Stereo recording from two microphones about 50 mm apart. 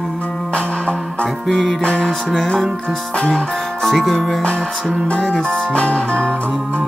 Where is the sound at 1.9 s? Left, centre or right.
Left.